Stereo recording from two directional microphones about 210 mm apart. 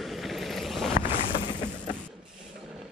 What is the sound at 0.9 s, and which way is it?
Vehicle, 30° left (ahead or behind).